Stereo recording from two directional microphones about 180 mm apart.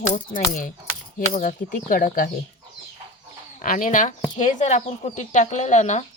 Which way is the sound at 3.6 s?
45° left (ahead or behind).